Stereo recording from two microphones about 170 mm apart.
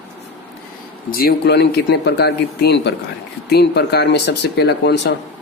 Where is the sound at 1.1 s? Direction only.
60° left (ahead or behind).